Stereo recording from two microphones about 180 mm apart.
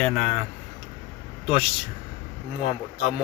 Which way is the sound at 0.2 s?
40° left (ahead or behind).